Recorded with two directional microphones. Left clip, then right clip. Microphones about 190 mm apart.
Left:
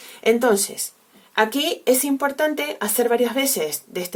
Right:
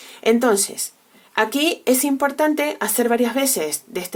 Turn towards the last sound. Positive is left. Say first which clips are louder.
# right 1 dB
turn(degrees=-25)  # may be behind; listen again after turning